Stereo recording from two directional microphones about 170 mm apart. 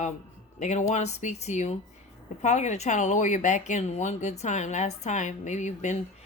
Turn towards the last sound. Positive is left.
turn(degrees=45)  # may be behind; listen again after turning